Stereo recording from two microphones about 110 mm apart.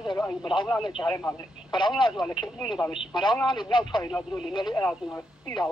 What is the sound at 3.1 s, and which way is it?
Speech, 45° left (ahead or behind).